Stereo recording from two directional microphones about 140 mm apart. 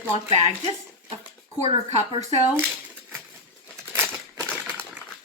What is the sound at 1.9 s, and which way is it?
Speech, 50° right (ahead or behind).